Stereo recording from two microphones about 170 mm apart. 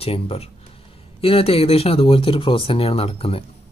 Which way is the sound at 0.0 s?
35° left (ahead or behind).